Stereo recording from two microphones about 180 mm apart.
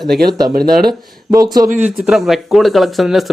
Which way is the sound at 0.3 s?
20° right (ahead or behind).